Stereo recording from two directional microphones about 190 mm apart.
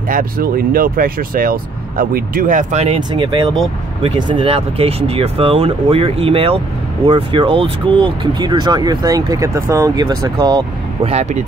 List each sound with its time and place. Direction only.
0.1 s speech: 50° right (ahead or behind)
3.0 s speech: 20° right (ahead or behind)
11.1 s speech: 35° right (ahead or behind)